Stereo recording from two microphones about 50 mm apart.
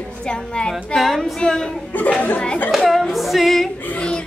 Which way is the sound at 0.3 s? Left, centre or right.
Centre.